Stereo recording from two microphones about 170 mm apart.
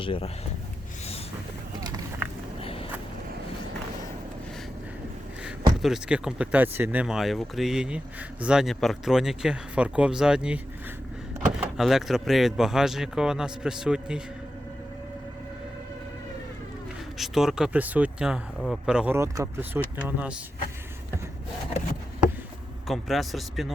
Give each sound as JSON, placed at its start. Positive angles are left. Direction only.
{"t": 0.0, "sound": "speech", "side_deg": 30}
{"t": 2.6, "sound": "a sound", "side_deg": 35}
{"t": 5.8, "sound": "speech", "side_deg": -5}
{"t": 11.6, "sound": "speech", "side_deg": 0}
{"t": 17.2, "sound": "speech", "side_deg": 0}
{"t": 19.1, "sound": "speech", "side_deg": -15}
{"t": 22.9, "sound": "speech", "side_deg": 0}